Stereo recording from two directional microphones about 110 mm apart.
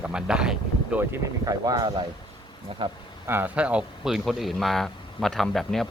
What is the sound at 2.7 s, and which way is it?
Speech, 60° right (ahead or behind).